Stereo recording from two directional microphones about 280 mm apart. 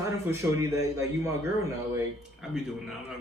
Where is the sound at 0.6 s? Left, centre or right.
Centre.